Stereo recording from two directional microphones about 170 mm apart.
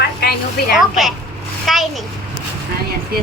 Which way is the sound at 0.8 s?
Centre (ahead or behind).